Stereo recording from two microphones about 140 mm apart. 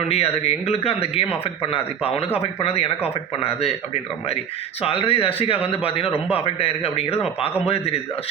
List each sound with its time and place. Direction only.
0.1 s a man's voice: 45° left (ahead or behind)
4.8 s a man's voice: 40° left (ahead or behind)